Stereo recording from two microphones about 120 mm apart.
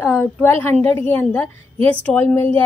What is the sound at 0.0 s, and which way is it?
A woman's voice, 15° left (ahead or behind).